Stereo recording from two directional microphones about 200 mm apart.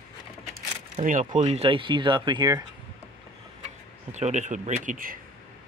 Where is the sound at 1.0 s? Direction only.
35° right (ahead or behind).